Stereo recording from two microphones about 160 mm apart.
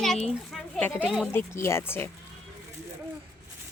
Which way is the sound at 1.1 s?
Centre (ahead or behind).